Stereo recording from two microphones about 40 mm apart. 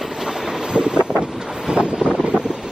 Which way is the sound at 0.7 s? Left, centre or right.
Centre.